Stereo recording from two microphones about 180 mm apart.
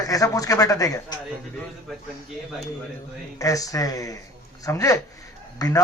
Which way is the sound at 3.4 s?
20° left (ahead or behind).